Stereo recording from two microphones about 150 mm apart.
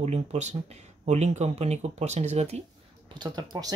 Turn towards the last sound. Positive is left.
turn(degrees=-30)  # may be behind; listen again after turning